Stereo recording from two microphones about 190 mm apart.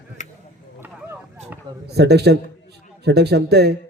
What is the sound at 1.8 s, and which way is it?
A man's voice, 60° right (ahead or behind).